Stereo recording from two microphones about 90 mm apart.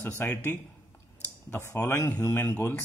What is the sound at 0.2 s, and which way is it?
Speech, 20° left (ahead or behind).